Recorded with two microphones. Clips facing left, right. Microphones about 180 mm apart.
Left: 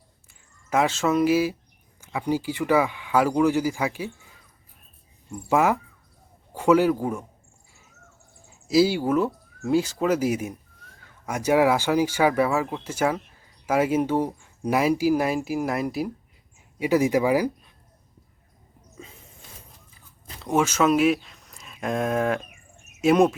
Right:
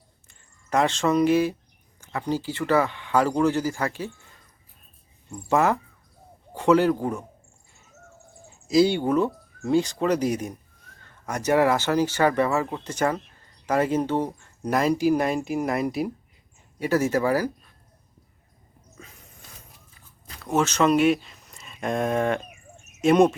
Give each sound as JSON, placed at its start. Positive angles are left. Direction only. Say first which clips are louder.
{"t": 0.3, "sound": "speech", "louder": "even", "side_deg": 5}
{"t": 5.5, "sound": "a man's voice", "louder": "even", "side_deg": 10}
{"t": 8.6, "sound": "speech", "louder": "even", "side_deg": 5}
{"t": 16.8, "sound": "speech", "louder": "left 2 dB", "side_deg": 15}
{"t": 20.3, "sound": "a sound", "louder": "left 1 dB", "side_deg": 25}
{"t": 20.6, "sound": "speech", "louder": "even", "side_deg": 5}